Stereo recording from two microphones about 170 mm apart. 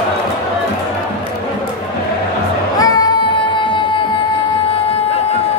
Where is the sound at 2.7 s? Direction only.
20° left (ahead or behind).